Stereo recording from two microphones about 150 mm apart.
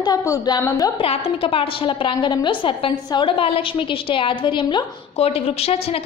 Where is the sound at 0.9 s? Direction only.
40° left (ahead or behind).